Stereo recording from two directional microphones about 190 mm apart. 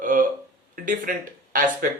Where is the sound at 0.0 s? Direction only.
45° right (ahead or behind).